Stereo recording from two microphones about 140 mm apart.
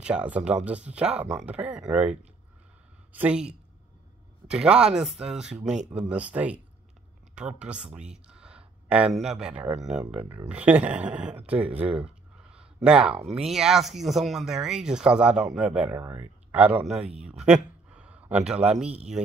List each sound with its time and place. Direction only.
0.0 s speech: 10° right (ahead or behind)
13.1 s speech: 45° right (ahead or behind)
13.4 s speech: 5° right (ahead or behind)